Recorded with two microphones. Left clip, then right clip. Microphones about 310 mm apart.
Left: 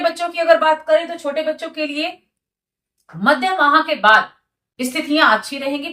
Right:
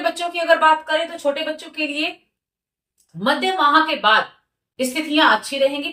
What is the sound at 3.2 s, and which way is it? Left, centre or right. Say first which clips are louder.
Speech: left 3 dB; centre.